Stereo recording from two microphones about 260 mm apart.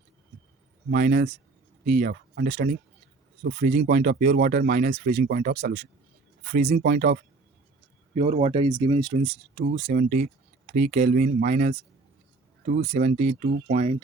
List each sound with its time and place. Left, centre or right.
0.9 s speech: right
8.1 s speech: right